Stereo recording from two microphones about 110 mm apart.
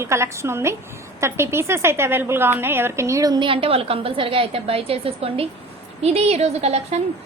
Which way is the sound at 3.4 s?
55° right (ahead or behind).